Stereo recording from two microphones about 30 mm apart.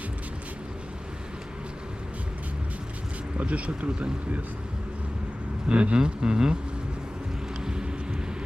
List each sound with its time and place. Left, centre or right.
3.3 s speech: right
5.7 s speech: right
7.6 s vehicle: right